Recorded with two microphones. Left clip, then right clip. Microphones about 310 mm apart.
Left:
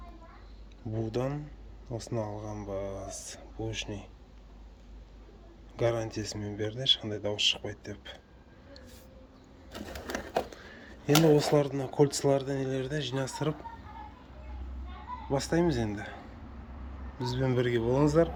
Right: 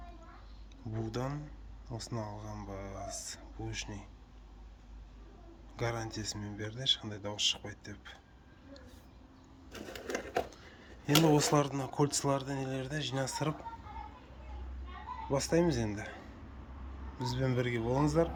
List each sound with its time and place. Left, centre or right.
0.9 s speech: centre
5.7 s speech: centre
9.7 s typewriter: centre
11.3 s speech: centre
15.3 s speech: centre